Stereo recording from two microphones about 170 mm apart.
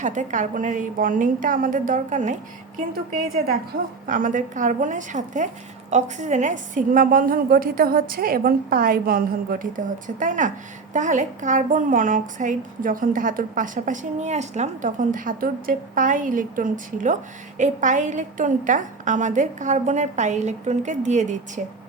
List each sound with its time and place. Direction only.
0.0 s a woman's voice: 45° right (ahead or behind)